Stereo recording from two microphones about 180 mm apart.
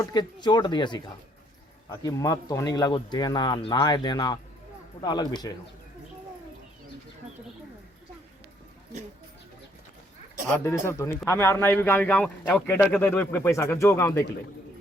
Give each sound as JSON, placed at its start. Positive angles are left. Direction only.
{"t": 0.1, "sound": "speech", "side_deg": 25}
{"t": 10.6, "sound": "a man's voice", "side_deg": 15}